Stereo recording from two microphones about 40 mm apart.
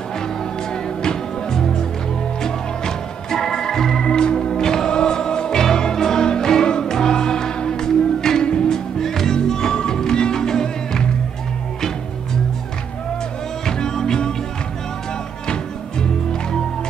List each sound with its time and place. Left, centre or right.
0.8 s music: centre
2.4 s organ: centre
4.0 s music: left
13.7 s music: centre
15.4 s music: centre